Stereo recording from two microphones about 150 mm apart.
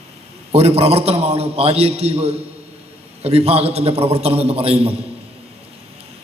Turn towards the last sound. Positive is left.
turn(degrees=-40)  # may be behind; listen again after turning